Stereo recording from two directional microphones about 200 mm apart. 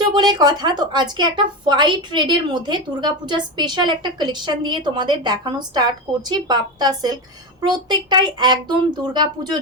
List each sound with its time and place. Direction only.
0.1 s a woman's voice: 20° right (ahead or behind)